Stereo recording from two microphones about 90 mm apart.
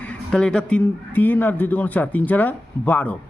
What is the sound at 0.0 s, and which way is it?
Speech, 10° left (ahead or behind).